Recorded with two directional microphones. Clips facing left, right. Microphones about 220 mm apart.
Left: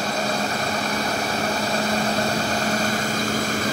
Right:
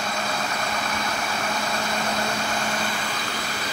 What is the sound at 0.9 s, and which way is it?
Vehicle, 35° left (ahead or behind).